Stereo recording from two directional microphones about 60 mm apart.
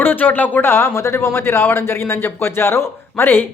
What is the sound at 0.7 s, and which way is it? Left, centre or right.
Speech, left.